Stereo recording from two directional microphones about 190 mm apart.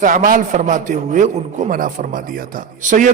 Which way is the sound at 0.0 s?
45° right (ahead or behind).